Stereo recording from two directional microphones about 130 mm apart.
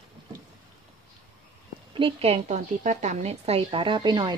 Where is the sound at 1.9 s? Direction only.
45° right (ahead or behind).